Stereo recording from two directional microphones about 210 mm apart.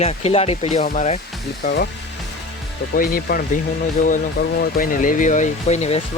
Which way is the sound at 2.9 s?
45° left (ahead or behind).